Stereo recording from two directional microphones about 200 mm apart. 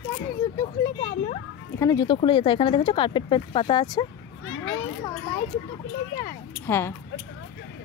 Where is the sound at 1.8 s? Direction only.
15° left (ahead or behind).